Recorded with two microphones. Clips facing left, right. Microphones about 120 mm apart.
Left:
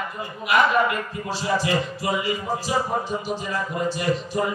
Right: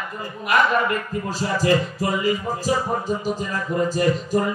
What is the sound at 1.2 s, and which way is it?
Speech, 40° right (ahead or behind).